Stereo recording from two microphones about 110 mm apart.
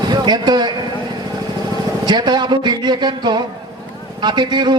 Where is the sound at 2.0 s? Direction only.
40° right (ahead or behind).